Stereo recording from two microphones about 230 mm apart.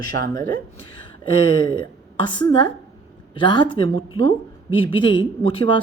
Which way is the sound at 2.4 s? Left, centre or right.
Centre.